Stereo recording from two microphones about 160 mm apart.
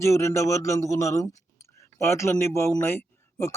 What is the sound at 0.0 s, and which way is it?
A man's voice, 20° left (ahead or behind).